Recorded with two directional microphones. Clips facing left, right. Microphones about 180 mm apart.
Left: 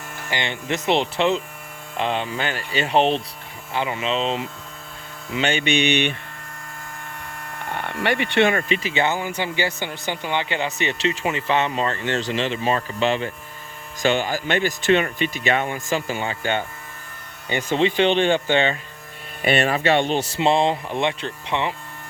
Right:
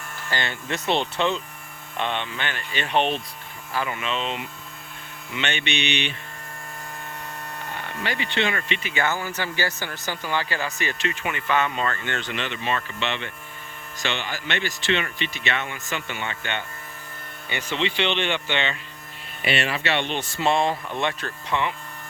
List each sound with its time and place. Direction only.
0.3 s speech: 20° left (ahead or behind)
7.7 s speech: 60° left (ahead or behind); by 16.6 s 35° left (ahead or behind)
17.5 s speech: 45° left (ahead or behind)
20.4 s speech: 20° left (ahead or behind)